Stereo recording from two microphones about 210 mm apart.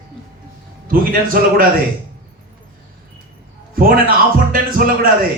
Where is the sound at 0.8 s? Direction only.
45° right (ahead or behind).